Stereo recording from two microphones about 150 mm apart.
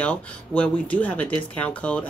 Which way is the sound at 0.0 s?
10° left (ahead or behind).